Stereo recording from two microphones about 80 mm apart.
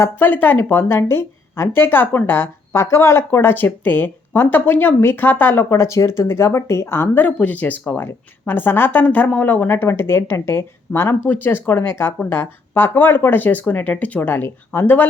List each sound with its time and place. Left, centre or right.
0.2 s speech: left
7.3 s speech: centre